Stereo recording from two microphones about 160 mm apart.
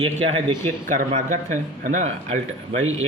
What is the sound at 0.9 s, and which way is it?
Speech, 50° right (ahead or behind).